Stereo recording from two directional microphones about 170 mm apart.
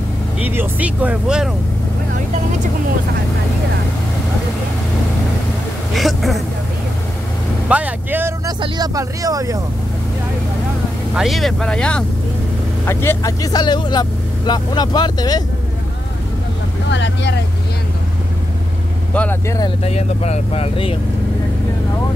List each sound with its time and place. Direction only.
0.4 s speech: 10° right (ahead or behind)
5.9 s speech: centre (ahead or behind)
7.6 s speech: 10° right (ahead or behind)
11.1 s speech: centre (ahead or behind); by 15.4 s 25° left (ahead or behind)
16.9 s speech: 90° left
19.1 s speech: 15° left (ahead or behind)
19.8 s speech: 40° left (ahead or behind)